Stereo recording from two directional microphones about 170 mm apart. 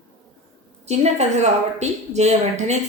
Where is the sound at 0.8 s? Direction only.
40° right (ahead or behind).